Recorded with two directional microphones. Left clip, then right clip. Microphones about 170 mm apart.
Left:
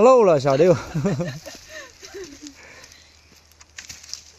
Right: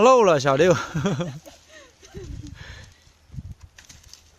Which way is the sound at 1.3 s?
25° left (ahead or behind).